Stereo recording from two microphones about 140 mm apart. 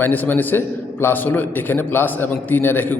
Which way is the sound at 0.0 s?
10° left (ahead or behind).